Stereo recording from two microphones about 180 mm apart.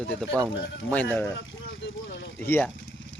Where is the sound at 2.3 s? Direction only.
10° left (ahead or behind).